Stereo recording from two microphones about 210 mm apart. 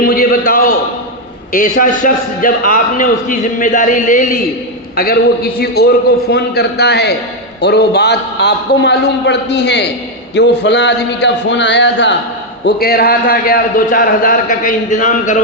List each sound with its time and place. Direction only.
0.0 s a sound: 45° left (ahead or behind)
1.5 s a man's voice: 40° left (ahead or behind); by 12.1 s 55° left (ahead or behind)
12.6 s a man's voice: 45° left (ahead or behind)